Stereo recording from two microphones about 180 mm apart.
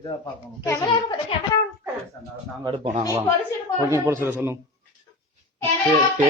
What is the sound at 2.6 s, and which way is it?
Speech, 30° right (ahead or behind).